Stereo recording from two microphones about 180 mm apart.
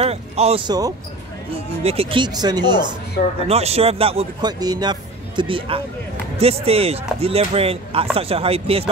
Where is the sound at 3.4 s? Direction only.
35° right (ahead or behind).